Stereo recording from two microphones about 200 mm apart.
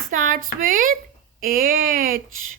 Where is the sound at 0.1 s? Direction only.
40° right (ahead or behind).